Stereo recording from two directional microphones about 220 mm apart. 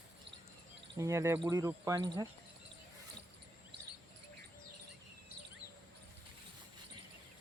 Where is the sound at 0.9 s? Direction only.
15° right (ahead or behind).